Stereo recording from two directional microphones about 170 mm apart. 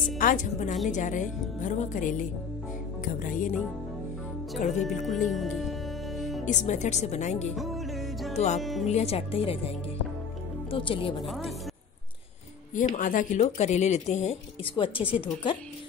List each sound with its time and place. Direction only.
0.2 s speech: 50° left (ahead or behind)
4.6 s speech: 40° left (ahead or behind)
5.0 s speech: centre (ahead or behind)
5.6 s music: centre (ahead or behind)
6.4 s speech: 45° left (ahead or behind)
7.5 s music: centre (ahead or behind)
8.5 s speech: centre (ahead or behind)
8.8 s speech: 40° left (ahead or behind)
11.2 s speech: centre (ahead or behind)
12.7 s speech: 50° left (ahead or behind); by 15.2 s 30° left (ahead or behind)